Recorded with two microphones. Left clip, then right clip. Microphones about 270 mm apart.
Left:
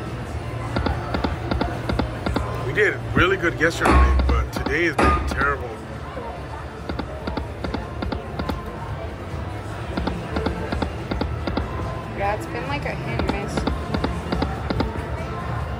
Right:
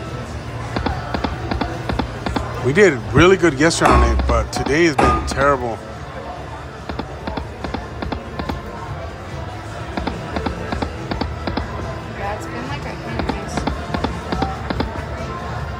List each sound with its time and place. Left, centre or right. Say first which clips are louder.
0.7 s a sound: right 3 dB; centre
2.7 s speech: right 7 dB; centre
7.0 s music: right 3 dB; centre
9.9 s music: right 2 dB; centre
13.3 s music: right 3 dB; centre